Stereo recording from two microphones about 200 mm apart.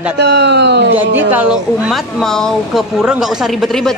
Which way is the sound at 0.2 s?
60° right (ahead or behind).